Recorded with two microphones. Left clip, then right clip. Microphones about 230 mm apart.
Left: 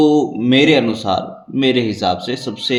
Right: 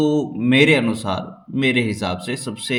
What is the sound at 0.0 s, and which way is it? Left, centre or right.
A man's voice, right.